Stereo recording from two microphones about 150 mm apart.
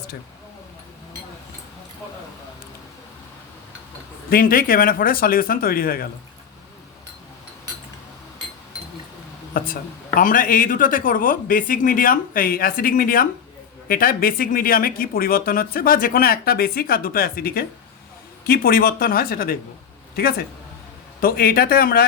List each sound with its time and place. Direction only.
4.3 s speech: 75° left (ahead or behind)
9.5 s a sound: 70° left (ahead or behind)
10.2 s speech: 65° left (ahead or behind); by 17.7 s 90° left
18.4 s speech: 75° left (ahead or behind)
21.2 s speech: 80° left